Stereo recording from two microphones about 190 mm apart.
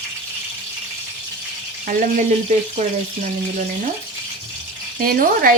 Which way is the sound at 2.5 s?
35° right (ahead or behind).